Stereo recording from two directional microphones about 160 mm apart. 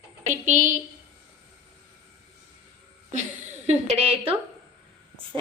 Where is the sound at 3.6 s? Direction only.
40° right (ahead or behind).